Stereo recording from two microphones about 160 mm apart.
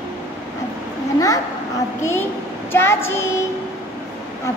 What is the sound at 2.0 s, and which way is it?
Child singing, 15° left (ahead or behind).